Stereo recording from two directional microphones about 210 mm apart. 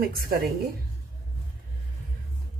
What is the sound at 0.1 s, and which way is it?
Speech, 45° right (ahead or behind).